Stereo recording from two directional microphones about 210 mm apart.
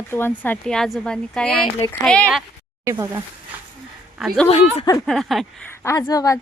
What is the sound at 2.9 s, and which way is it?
Speech, 20° right (ahead or behind).